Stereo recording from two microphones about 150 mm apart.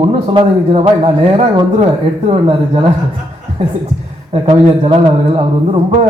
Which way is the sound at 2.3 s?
35° right (ahead or behind).